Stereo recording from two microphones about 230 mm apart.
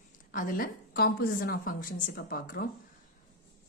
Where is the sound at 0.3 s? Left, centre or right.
Left.